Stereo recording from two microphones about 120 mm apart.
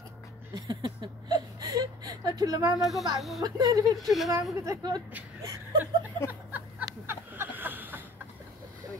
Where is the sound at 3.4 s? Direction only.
30° right (ahead or behind).